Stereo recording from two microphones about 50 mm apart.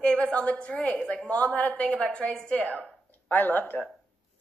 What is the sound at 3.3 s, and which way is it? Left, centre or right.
Speech, left.